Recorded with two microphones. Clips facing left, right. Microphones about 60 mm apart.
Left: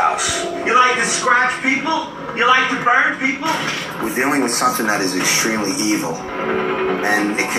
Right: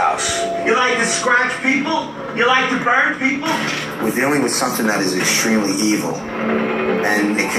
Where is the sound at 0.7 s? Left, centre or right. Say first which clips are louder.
Left 3 dB; centre.